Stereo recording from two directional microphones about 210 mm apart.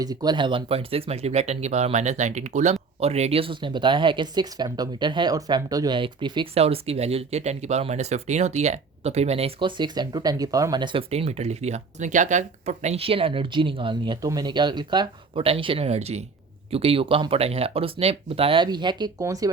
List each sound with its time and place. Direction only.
0.0 s speech: 20° right (ahead or behind)